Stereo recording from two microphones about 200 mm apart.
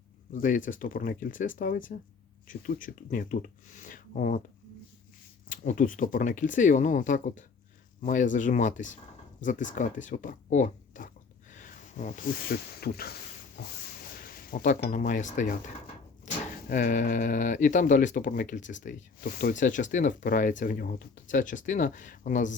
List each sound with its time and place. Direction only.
0.3 s speech: 40° left (ahead or behind)
5.5 s speech: 40° left (ahead or behind)